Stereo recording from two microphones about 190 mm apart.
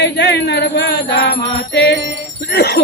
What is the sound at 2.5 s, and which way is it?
Speech, 60° left (ahead or behind).